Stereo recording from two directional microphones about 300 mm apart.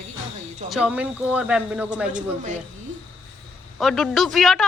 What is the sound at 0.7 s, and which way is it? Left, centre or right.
Speech, centre.